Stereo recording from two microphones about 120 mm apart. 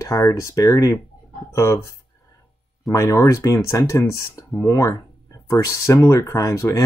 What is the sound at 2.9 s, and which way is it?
Speech, 25° left (ahead or behind).